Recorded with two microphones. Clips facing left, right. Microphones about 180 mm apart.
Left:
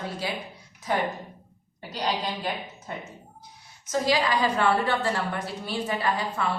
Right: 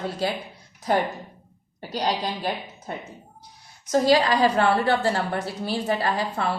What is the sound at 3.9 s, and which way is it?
A woman's voice, 35° right (ahead or behind).